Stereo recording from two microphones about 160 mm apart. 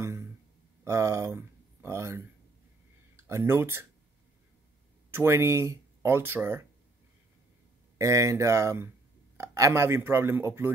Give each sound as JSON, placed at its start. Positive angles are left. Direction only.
{"t": 0.8, "sound": "speech", "side_deg": -20}
{"t": 5.1, "sound": "speech", "side_deg": -15}
{"t": 8.0, "sound": "speech", "side_deg": -20}